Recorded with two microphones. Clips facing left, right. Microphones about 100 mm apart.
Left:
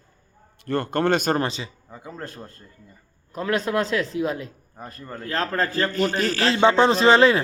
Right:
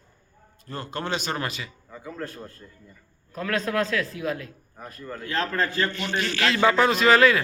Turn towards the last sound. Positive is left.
turn(degrees=30)  # may be behind; listen again after turning